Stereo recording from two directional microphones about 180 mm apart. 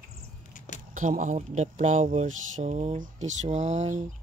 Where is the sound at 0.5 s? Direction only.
40° left (ahead or behind).